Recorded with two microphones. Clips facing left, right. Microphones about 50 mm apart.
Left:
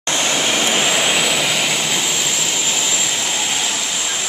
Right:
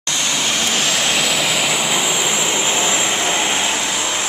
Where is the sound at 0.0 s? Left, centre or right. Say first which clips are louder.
Left 2 dB; left.